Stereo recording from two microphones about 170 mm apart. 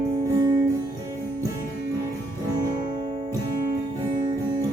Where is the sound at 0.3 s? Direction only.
25° right (ahead or behind).